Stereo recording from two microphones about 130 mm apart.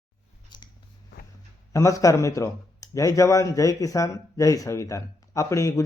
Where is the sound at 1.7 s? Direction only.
25° left (ahead or behind).